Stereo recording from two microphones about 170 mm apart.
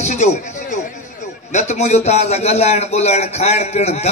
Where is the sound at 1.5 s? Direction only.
45° left (ahead or behind).